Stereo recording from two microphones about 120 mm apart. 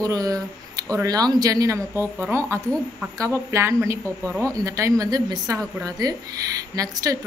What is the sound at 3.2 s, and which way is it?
A woman's voice, 25° right (ahead or behind).